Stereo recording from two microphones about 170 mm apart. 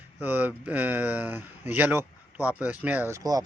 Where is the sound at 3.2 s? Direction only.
20° right (ahead or behind).